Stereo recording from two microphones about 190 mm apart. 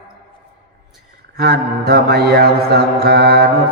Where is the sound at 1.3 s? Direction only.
55° right (ahead or behind).